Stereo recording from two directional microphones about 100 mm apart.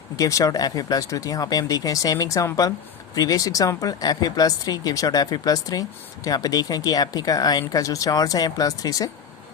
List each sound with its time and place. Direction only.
0.2 s speech: 35° left (ahead or behind)